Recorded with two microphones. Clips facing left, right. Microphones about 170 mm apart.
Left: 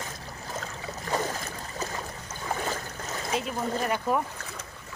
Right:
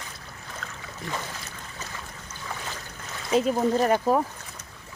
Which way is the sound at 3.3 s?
40° right (ahead or behind).